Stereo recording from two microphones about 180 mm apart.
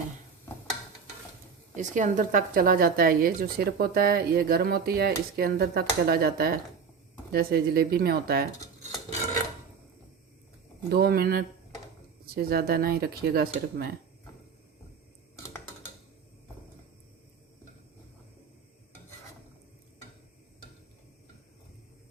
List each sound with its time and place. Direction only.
1.7 s a woman's voice: 45° right (ahead or behind)
10.8 s a woman's voice: 60° right (ahead or behind)